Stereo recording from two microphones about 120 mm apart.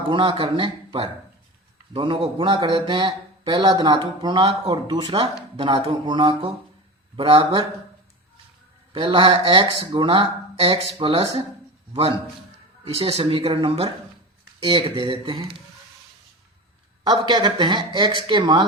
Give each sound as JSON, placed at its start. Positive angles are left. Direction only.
{"t": 0.1, "sound": "a man's voice", "side_deg": -45}
{"t": 8.9, "sound": "speech", "side_deg": -45}
{"t": 12.8, "sound": "speech", "side_deg": -55}
{"t": 17.0, "sound": "a man's voice", "side_deg": -35}